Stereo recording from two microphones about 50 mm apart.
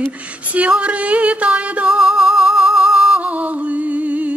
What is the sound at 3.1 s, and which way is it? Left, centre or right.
Music, right.